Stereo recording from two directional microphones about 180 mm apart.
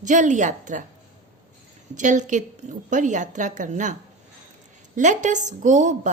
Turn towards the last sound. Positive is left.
turn(degrees=-45)  # may be behind; listen again after turning